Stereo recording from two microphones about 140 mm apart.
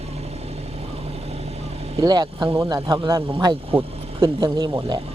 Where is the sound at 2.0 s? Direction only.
30° right (ahead or behind).